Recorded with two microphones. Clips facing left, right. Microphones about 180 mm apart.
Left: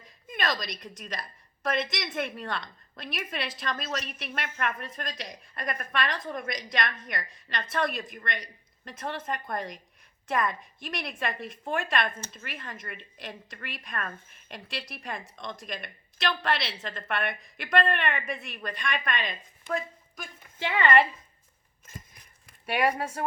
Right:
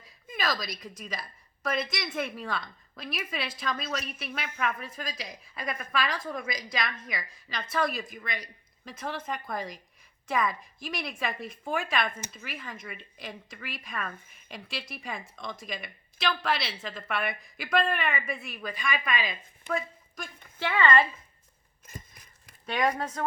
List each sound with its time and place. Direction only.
0.0 s speech: centre (ahead or behind)
20.6 s a woman's voice: 20° left (ahead or behind)
22.6 s speech: 10° left (ahead or behind)